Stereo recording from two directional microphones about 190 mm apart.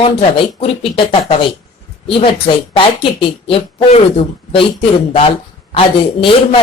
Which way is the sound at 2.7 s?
30° left (ahead or behind).